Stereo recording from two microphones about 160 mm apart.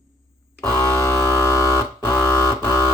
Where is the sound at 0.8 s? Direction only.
15° left (ahead or behind).